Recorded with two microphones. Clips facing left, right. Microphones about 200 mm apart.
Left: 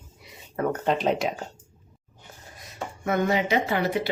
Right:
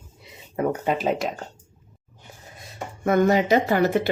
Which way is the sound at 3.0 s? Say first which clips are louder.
Right 5 dB; 45° right (ahead or behind).